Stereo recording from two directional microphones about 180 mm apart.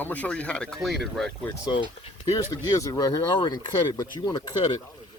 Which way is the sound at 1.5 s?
25° left (ahead or behind).